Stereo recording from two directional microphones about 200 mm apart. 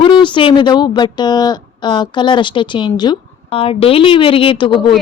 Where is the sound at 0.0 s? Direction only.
25° left (ahead or behind).